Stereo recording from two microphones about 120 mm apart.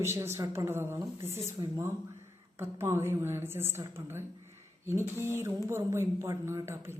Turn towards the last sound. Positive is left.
turn(degrees=-20)  # may be behind; listen again after turning